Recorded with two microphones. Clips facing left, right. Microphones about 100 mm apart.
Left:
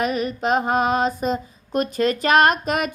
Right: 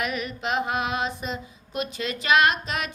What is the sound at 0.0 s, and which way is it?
Female singing, 35° left (ahead or behind).